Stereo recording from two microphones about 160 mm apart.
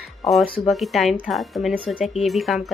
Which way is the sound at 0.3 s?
Centre (ahead or behind).